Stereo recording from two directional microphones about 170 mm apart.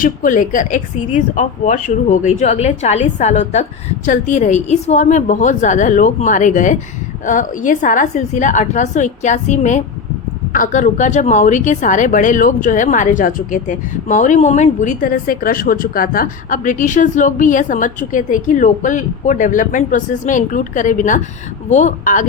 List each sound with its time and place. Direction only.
0.0 s a woman's voice: 50° left (ahead or behind)